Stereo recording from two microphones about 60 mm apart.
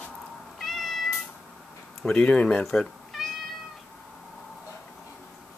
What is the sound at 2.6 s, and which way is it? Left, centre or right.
Cat, centre.